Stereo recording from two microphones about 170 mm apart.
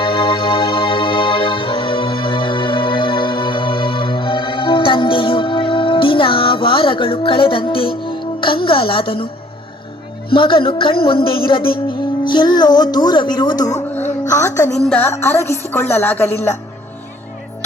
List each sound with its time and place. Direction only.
0.0 s music: 30° left (ahead or behind)
10.3 s speech: 30° left (ahead or behind)
13.9 s a sound: 15° left (ahead or behind)
14.8 s speech: 10° left (ahead or behind)